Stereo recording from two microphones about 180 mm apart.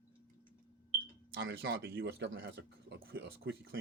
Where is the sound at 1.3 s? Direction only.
80° right.